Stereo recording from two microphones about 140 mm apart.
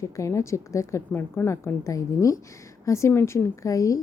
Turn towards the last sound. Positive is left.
turn(degrees=25)  # may be behind; listen again after turning